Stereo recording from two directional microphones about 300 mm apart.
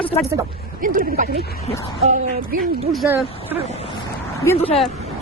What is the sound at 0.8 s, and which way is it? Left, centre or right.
Speech, right.